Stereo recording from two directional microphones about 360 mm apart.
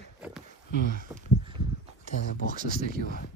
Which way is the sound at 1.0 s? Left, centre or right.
Centre.